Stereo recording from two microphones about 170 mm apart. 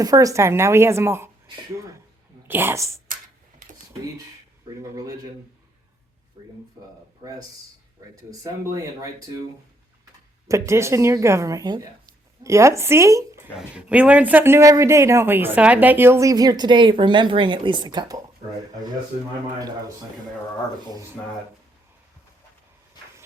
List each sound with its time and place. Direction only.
0.0 s speech: 20° right (ahead or behind)
2.5 s speech: 15° right (ahead or behind)
4.8 s speech: 20° right (ahead or behind)
8.3 s speech: 20° right (ahead or behind)
10.5 s speech: 15° right (ahead or behind)
13.6 s speech: 5° right (ahead or behind); by 18.2 s 25° right (ahead or behind)
19.5 s speech: 20° right (ahead or behind)